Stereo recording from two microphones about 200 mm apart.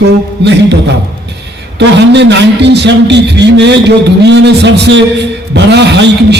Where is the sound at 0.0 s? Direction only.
60° right (ahead or behind).